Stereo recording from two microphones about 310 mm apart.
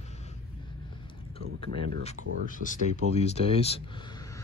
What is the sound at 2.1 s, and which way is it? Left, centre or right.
Speech, left.